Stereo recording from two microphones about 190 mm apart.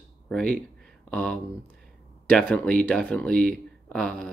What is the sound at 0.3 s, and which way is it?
Speech, 5° left (ahead or behind).